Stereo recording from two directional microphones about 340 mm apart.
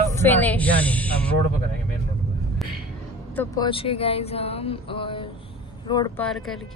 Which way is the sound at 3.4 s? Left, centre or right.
Centre.